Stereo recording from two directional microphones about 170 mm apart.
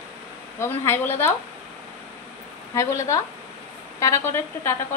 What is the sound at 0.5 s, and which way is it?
Speech, 15° left (ahead or behind).